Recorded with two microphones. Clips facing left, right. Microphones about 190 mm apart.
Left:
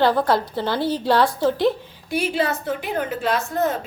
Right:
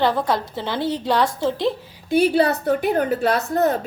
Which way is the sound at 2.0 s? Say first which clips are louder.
Right 6 dB; 35° right (ahead or behind).